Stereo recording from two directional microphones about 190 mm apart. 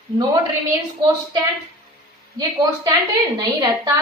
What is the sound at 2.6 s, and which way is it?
A woman's voice, 20° right (ahead or behind).